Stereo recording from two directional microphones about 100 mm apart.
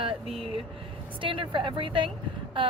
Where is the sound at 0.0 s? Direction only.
65° right (ahead or behind).